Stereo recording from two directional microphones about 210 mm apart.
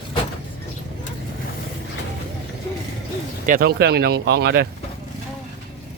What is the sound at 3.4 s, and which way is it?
Speech, 45° right (ahead or behind).